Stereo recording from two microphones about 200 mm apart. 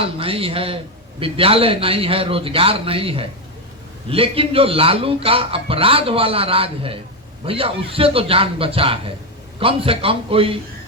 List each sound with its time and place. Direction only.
0.0 s speech: 30° right (ahead or behind)